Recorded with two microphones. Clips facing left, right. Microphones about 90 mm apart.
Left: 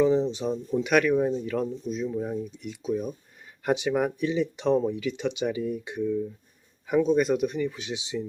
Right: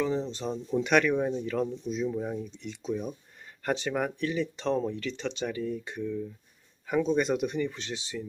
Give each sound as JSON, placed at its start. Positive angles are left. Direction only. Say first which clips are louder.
{"t": 0.0, "sound": "speech", "louder": "left 7 dB", "side_deg": 15}
{"t": 7.9, "sound": "speech", "louder": "left 5 dB", "side_deg": 15}